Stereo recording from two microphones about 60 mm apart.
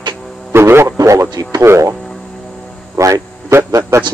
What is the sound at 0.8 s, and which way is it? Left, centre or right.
Speech, right.